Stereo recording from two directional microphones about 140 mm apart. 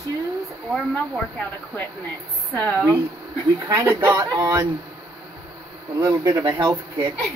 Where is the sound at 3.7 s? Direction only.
20° right (ahead or behind).